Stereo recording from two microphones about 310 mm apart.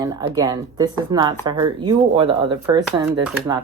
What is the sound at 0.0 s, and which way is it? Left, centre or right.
Speech, centre.